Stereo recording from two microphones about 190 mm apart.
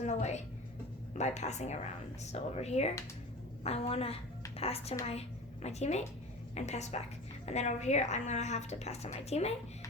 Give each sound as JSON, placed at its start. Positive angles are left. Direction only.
{"t": 0.0, "sound": "a woman's voice", "side_deg": 35}